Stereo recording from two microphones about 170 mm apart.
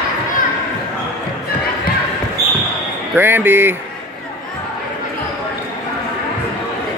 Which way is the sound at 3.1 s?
10° right (ahead or behind).